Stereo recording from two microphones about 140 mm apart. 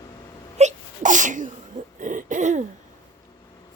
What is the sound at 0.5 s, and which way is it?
Wail, 60° right (ahead or behind).